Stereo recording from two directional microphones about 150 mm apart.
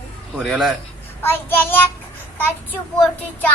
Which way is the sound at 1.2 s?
15° left (ahead or behind).